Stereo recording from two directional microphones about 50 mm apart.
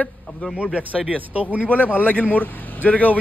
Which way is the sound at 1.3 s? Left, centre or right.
Right.